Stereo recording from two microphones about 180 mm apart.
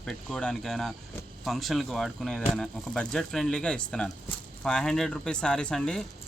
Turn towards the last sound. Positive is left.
turn(degrees=5)  # may be behind; listen again after turning